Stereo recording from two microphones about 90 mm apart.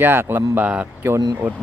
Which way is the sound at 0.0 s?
25° right (ahead or behind).